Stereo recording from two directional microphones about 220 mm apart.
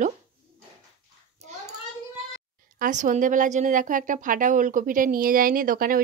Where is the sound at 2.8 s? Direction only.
35° right (ahead or behind).